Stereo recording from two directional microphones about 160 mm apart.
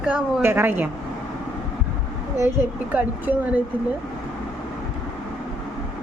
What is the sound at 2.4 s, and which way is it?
Speech, 15° right (ahead or behind).